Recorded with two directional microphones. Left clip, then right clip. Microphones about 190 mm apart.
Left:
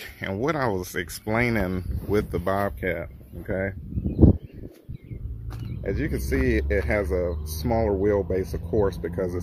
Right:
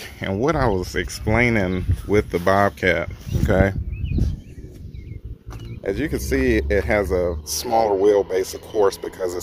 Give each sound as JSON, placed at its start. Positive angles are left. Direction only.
{"t": 0.0, "sound": "speech", "side_deg": -5}
{"t": 3.4, "sound": "speech", "side_deg": -20}
{"t": 5.8, "sound": "speech", "side_deg": -25}